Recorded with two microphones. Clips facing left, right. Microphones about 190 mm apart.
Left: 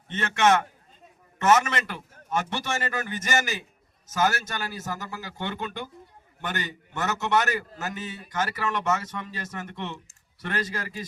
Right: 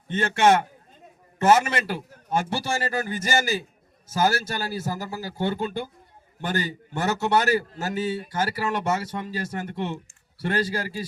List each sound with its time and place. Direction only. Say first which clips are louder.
0.1 s a man's voice: right 3 dB; 30° right (ahead or behind)